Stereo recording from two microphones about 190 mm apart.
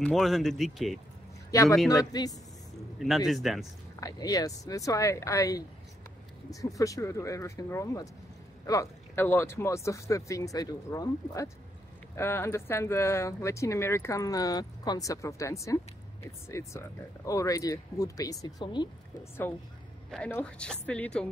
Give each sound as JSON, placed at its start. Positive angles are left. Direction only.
{"t": 0.0, "sound": "a woman's voice", "side_deg": 0}
{"t": 1.5, "sound": "speech", "side_deg": 15}
{"t": 3.0, "sound": "a woman's voice", "side_deg": 0}
{"t": 4.0, "sound": "speech", "side_deg": 20}
{"t": 20.1, "sound": "a woman's voice", "side_deg": 0}